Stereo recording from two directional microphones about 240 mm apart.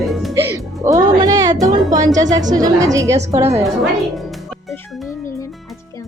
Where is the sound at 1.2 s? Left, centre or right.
Centre.